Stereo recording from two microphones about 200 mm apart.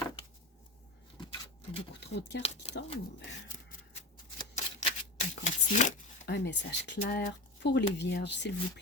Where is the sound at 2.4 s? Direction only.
35° left (ahead or behind).